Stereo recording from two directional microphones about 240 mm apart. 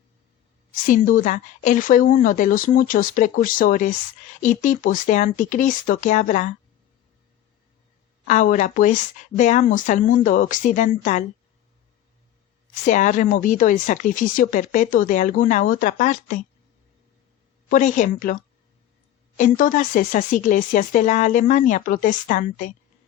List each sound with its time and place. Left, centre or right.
0.7 s speech: left
8.3 s speech: left
12.8 s speech: left
17.7 s speech: left
19.4 s speech: left